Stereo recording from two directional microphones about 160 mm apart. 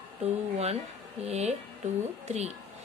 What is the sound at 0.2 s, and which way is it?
Speech, 40° right (ahead or behind).